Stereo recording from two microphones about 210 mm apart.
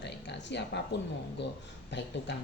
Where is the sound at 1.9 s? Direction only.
55° left (ahead or behind).